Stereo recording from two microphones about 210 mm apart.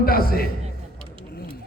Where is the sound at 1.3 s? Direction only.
50° left (ahead or behind).